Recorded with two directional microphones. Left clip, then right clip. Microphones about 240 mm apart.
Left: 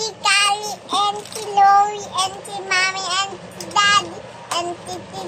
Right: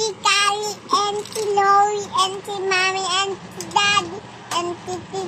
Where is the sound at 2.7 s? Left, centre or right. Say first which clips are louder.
Even; centre.